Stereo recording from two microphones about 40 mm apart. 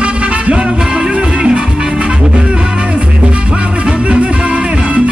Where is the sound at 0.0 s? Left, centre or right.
Right.